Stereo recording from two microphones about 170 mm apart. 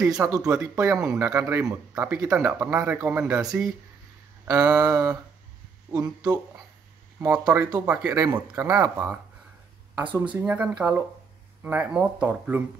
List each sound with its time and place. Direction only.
0.0 s speech: 15° right (ahead or behind)
5.9 s speech: 20° right (ahead or behind)
7.4 s speech: 25° right (ahead or behind)
7.8 s speech: 10° right (ahead or behind)
10.3 s speech: 10° right (ahead or behind)